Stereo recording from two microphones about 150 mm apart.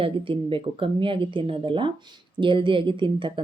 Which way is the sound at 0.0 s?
35° right (ahead or behind).